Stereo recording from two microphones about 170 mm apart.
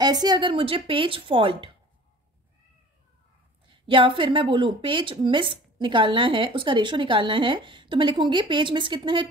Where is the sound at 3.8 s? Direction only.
30° right (ahead or behind).